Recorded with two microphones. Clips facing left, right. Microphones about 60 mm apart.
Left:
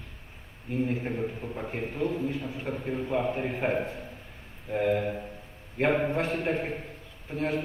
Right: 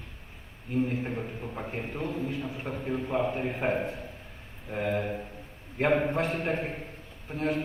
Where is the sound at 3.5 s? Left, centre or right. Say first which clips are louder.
Even; right.